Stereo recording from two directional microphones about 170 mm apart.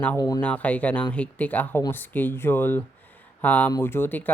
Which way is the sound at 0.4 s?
10° left (ahead or behind).